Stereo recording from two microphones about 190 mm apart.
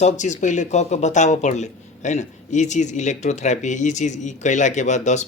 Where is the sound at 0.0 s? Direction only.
40° left (ahead or behind).